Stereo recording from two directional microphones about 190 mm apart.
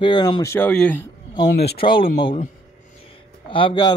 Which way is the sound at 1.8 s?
25° left (ahead or behind).